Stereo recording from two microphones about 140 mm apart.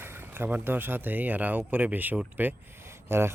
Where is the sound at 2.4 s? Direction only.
15° right (ahead or behind).